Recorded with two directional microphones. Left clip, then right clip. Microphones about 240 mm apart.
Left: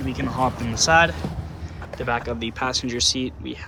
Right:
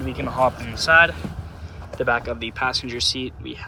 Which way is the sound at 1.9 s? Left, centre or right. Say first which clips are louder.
Right 3 dB; centre.